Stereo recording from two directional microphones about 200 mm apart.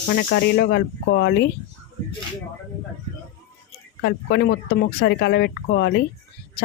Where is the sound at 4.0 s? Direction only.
60° left (ahead or behind).